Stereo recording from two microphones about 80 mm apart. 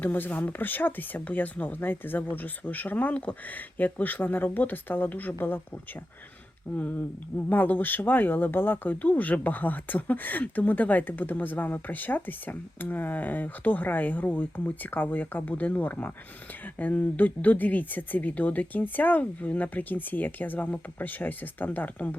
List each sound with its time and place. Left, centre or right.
0.0 s speech: left
6.7 s speech: left